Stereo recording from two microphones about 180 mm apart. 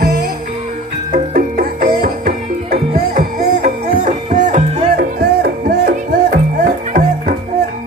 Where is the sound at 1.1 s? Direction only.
55° right (ahead or behind).